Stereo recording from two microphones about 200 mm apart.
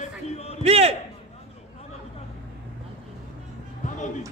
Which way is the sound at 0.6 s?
30° right (ahead or behind).